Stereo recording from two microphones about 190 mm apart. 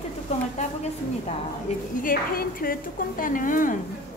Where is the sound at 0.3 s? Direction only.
35° left (ahead or behind).